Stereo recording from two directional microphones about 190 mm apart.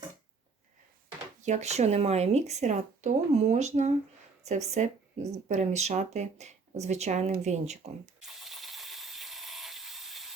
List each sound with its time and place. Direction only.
1.4 s speech: 40° right (ahead or behind)
8.2 s engine starting: centre (ahead or behind)